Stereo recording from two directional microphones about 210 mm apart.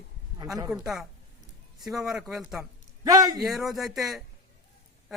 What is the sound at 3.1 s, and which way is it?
Speech, 20° right (ahead or behind).